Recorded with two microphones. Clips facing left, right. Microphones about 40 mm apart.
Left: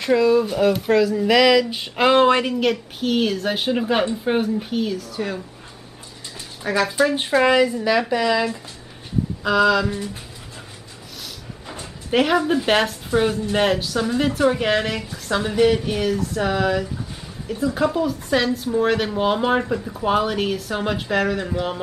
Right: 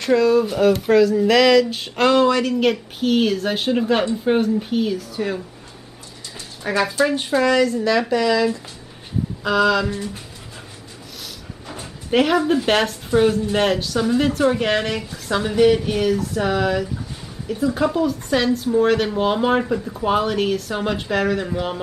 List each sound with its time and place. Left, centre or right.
0.0 s speech: centre
2.1 s speech: left
2.5 s speech: centre
6.6 s speech: centre
7.2 s speech: left
9.4 s speech: centre
11.8 s speech: centre